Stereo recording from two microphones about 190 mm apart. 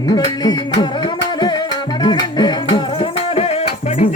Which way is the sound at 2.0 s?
25° left (ahead or behind).